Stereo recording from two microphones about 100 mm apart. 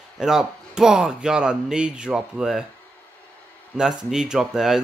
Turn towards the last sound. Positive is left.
turn(degrees=-5)  # may be behind; listen again after turning